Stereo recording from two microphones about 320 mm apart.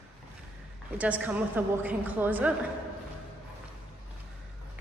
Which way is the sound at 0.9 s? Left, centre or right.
Centre.